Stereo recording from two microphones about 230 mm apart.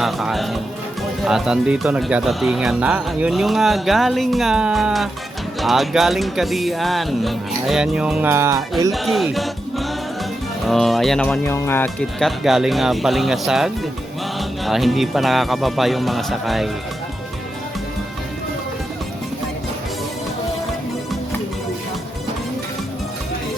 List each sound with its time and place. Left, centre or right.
0.0 s speech: centre
8.9 s music: centre
10.7 s speech: centre